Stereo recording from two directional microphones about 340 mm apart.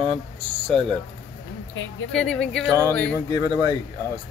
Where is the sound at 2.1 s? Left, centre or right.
Centre.